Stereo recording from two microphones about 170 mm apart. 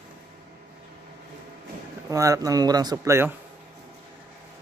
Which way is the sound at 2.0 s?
20° right (ahead or behind).